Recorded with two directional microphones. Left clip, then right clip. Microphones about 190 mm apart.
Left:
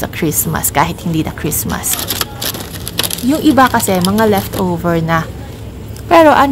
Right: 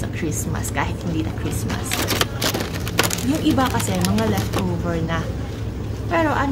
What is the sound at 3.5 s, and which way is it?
Speech, 45° left (ahead or behind).